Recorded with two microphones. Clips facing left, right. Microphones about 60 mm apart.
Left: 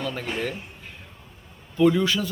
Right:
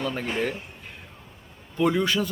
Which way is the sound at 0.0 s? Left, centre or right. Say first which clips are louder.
Right 1 dB; right.